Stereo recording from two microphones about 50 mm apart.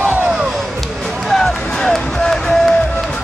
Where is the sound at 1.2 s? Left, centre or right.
Centre.